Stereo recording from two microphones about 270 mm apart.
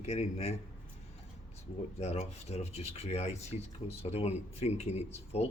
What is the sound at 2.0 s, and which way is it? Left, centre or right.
Speech, left.